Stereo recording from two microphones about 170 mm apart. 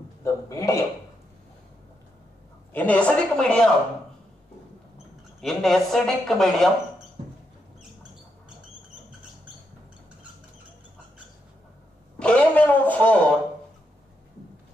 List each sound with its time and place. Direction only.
0.2 s a woman's voice: 15° left (ahead or behind)
2.7 s a woman's voice: 10° left (ahead or behind)
4.9 s speech: centre (ahead or behind)
12.2 s a sound: 5° left (ahead or behind)